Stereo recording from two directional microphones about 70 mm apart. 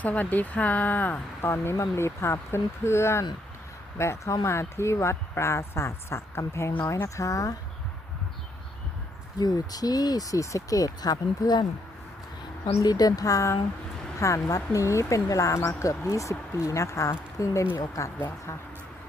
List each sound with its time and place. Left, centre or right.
0.0 s speech: left
1.5 s speech: left
9.4 s speech: left
12.8 s speech: left